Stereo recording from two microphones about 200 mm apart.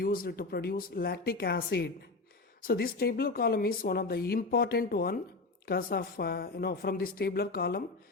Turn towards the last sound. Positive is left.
turn(degrees=50)  # may be behind; listen again after turning